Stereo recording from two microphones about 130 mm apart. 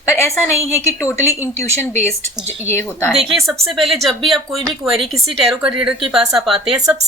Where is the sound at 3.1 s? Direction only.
Centre (ahead or behind).